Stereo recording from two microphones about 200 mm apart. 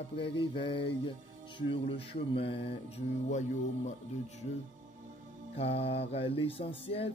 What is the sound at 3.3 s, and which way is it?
Music, 35° left (ahead or behind).